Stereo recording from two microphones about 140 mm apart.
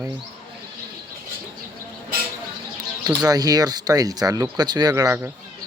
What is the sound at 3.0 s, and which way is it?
Speech, 25° right (ahead or behind).